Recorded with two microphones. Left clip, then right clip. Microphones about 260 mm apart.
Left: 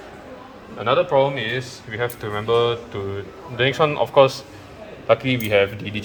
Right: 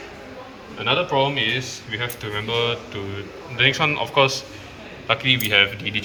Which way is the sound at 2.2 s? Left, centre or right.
Left.